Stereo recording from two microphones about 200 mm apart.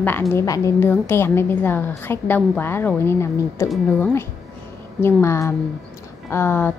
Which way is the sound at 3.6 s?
Centre (ahead or behind).